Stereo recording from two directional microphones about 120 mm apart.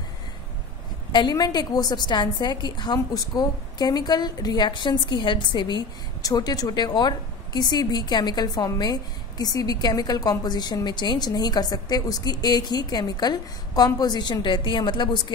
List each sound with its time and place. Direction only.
1.1 s a woman's voice: 35° left (ahead or behind)